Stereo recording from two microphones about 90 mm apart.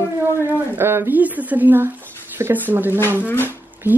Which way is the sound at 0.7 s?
25° right (ahead or behind).